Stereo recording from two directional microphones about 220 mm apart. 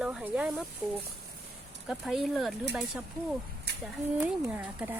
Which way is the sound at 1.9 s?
Centre (ahead or behind).